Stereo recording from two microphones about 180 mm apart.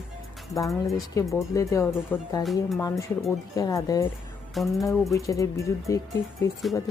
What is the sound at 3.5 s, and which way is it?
Speech, 20° left (ahead or behind).